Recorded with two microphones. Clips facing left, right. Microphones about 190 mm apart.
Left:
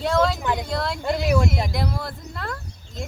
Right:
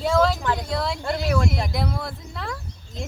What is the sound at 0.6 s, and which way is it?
Speech, centre (ahead or behind).